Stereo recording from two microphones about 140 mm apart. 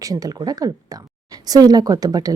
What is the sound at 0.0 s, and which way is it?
Speech, 25° right (ahead or behind).